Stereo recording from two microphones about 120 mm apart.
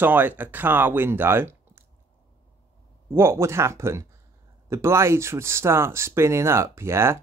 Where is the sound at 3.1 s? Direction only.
20° right (ahead or behind).